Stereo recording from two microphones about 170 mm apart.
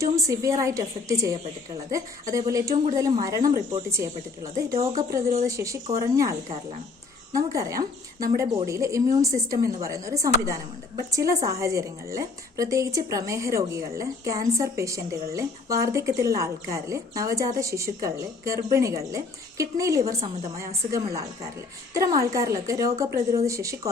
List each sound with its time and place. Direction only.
0.0 s a woman's voice: 20° right (ahead or behind)
7.3 s a woman's voice: 20° right (ahead or behind)